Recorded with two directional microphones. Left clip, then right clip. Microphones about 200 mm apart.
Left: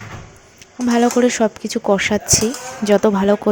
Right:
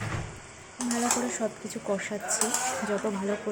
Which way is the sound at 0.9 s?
40° left (ahead or behind).